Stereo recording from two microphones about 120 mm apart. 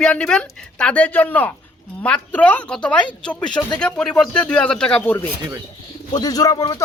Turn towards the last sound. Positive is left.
turn(degrees=30)  # may be behind; listen again after turning